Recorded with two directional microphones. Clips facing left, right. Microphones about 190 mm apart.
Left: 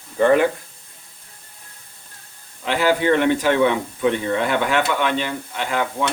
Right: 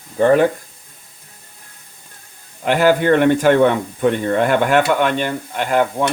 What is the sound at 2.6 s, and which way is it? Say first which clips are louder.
Speech: right 4 dB; 50° right (ahead or behind).